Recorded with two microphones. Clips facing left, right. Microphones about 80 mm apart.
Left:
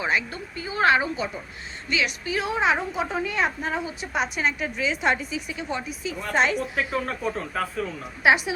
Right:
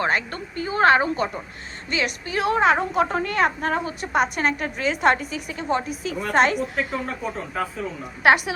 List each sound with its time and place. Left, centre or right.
0.0 s a woman's voice: right
6.6 s speech: centre
8.2 s a woman's voice: right